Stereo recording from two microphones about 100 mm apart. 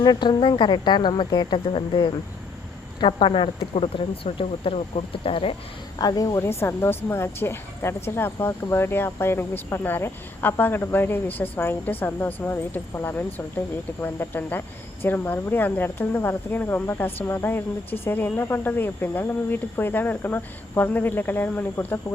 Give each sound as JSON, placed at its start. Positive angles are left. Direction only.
{"t": 0.0, "sound": "speech", "side_deg": 45}
{"t": 1.6, "sound": "speech", "side_deg": 60}
{"t": 3.1, "sound": "speech", "side_deg": 60}
{"t": 6.0, "sound": "speech", "side_deg": 40}